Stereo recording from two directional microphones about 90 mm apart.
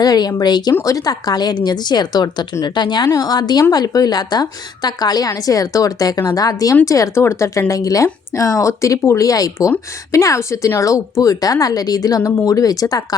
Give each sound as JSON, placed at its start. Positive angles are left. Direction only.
{"t": 0.0, "sound": "a woman's voice", "side_deg": 50}